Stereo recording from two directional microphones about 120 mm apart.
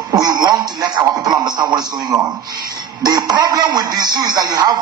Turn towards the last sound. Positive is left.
turn(degrees=-35)  # may be behind; listen again after turning